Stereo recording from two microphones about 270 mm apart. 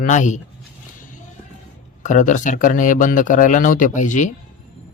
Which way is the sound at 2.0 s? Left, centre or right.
Left.